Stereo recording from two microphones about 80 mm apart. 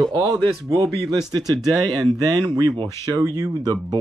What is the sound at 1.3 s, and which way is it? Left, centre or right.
Speech, right.